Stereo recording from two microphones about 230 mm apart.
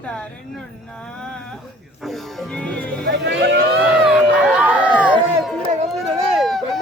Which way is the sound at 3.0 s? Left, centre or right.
Right.